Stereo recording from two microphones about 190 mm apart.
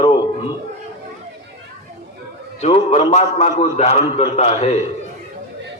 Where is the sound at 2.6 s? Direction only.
35° left (ahead or behind).